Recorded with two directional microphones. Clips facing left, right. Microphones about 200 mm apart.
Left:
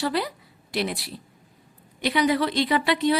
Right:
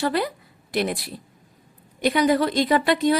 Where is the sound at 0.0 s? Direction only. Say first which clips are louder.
Right 3 dB; 50° right (ahead or behind).